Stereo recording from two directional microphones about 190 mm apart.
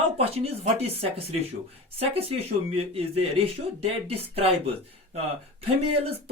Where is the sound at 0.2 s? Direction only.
30° right (ahead or behind).